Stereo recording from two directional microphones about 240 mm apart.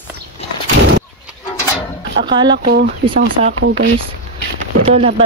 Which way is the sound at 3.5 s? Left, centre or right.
Right.